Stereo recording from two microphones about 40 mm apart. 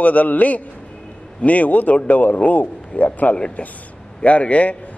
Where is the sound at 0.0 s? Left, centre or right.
Left.